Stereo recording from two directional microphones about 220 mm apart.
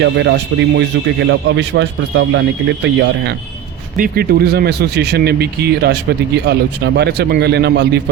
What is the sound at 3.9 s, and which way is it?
Speech, 40° right (ahead or behind).